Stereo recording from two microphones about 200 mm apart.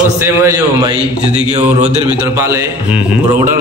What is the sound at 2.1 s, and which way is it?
Mantra, 15° right (ahead or behind).